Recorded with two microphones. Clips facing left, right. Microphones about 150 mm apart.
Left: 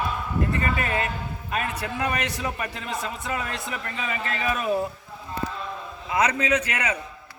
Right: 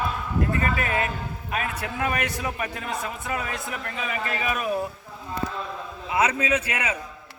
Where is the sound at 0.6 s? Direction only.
Centre (ahead or behind).